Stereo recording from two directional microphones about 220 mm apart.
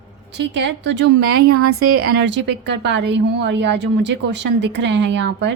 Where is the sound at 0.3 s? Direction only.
50° right (ahead or behind).